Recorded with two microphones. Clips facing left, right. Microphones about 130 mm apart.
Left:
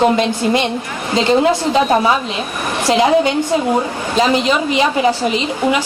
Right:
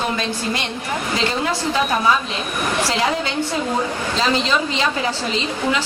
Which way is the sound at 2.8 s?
20° left (ahead or behind).